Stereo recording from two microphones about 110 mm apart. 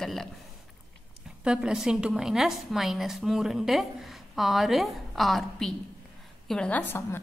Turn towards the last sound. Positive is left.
turn(degrees=20)  # may be behind; listen again after turning